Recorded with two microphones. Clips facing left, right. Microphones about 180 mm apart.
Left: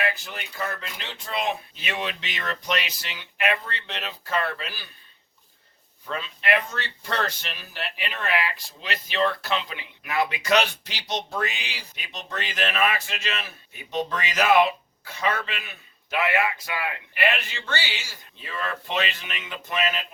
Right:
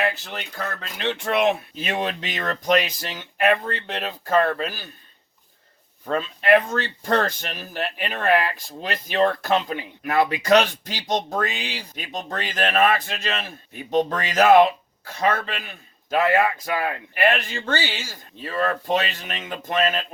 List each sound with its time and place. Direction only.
0.8 s speech: 65° right (ahead or behind)
1.8 s speech: 40° right (ahead or behind)
6.1 s speech: 40° right (ahead or behind)